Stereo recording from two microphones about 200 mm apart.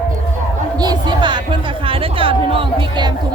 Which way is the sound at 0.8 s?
20° right (ahead or behind).